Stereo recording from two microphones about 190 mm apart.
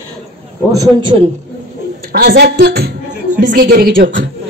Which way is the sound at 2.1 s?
50° right (ahead or behind).